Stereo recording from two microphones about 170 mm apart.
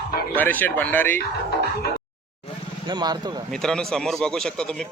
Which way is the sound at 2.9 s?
25° right (ahead or behind).